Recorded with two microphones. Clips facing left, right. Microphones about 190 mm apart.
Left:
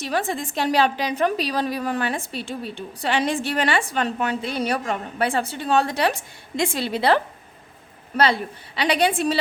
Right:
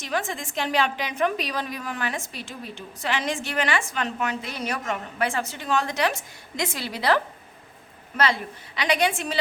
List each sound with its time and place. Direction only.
0.0 s a woman's voice: 35° left (ahead or behind)